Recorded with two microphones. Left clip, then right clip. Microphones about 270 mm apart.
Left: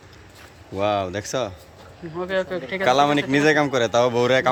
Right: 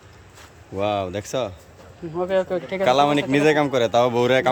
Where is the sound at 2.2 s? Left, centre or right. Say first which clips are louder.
Right 3 dB; right.